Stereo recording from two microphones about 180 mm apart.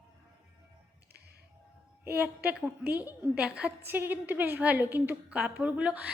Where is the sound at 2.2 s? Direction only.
10° right (ahead or behind).